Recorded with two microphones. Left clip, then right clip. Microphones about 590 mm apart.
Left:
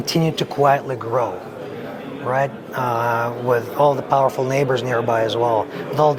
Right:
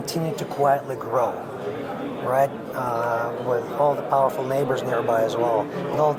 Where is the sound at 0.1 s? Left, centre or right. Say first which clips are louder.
Left 7 dB; left.